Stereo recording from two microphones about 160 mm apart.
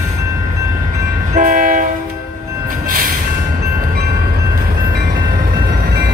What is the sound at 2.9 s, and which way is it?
Vehicle, 60° right (ahead or behind).